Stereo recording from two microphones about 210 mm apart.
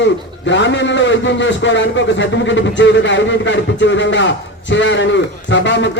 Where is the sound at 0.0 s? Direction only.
60° left (ahead or behind).